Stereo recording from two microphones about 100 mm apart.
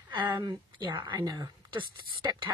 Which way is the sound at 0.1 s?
50° right (ahead or behind).